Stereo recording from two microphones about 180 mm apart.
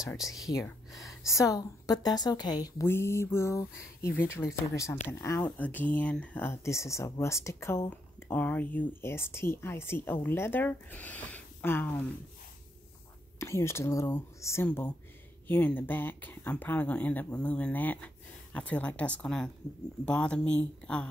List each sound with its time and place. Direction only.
0.5 s speech: 15° left (ahead or behind)
13.4 s speech: 15° left (ahead or behind)